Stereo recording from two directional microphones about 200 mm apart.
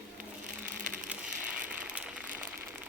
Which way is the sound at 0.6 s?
5° right (ahead or behind).